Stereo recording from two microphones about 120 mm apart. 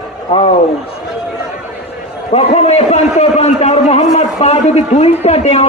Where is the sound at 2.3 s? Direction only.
60° left (ahead or behind).